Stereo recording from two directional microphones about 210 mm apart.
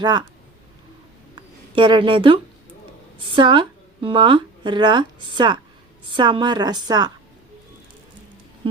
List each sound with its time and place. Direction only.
0.0 s a woman's voice: 20° right (ahead or behind)
1.7 s a woman's voice: 25° right (ahead or behind)